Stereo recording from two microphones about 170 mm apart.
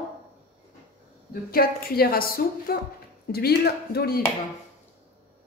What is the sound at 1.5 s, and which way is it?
A woman's voice, 60° left (ahead or behind).